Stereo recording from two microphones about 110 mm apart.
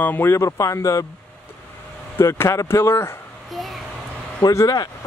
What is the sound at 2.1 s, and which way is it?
Speech, 25° left (ahead or behind).